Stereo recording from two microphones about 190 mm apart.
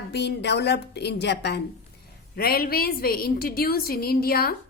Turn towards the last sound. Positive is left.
turn(degrees=55)  # may be behind; listen again after turning